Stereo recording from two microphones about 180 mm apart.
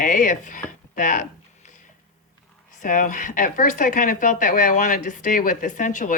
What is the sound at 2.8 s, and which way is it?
Speech, 45° left (ahead or behind).